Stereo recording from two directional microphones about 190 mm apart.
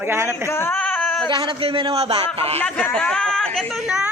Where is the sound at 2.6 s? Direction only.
5° left (ahead or behind).